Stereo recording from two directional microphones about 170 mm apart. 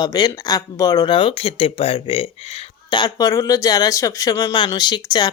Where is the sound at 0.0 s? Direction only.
25° left (ahead or behind).